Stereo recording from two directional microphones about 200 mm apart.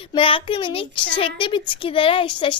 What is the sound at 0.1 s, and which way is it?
A woman's voice, 25° left (ahead or behind).